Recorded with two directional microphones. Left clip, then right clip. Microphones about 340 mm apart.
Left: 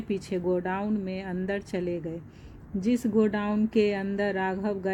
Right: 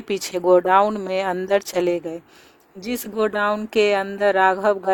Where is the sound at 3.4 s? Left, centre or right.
Right.